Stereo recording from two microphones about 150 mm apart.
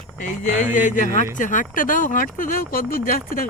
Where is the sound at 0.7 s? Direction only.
60° left (ahead or behind).